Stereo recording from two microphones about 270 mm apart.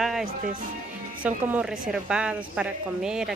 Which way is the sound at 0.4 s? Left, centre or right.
Right.